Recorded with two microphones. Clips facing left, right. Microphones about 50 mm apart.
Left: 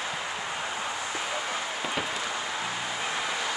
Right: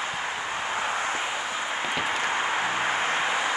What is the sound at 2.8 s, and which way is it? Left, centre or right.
Vehicle, right.